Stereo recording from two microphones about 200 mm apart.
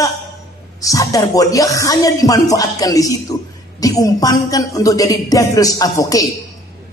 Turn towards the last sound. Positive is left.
turn(degrees=15)  # may be behind; listen again after turning